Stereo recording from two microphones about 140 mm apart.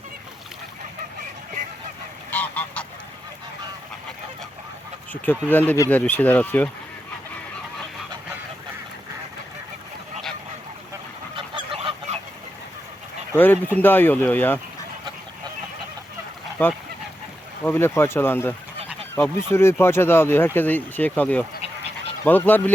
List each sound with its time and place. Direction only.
2.3 s goose: 10° left (ahead or behind)
5.1 s speech: 10° left (ahead or behind)
11.3 s goose: 35° right (ahead or behind)
13.3 s speech: 15° left (ahead or behind)
16.6 s speech: 15° left (ahead or behind)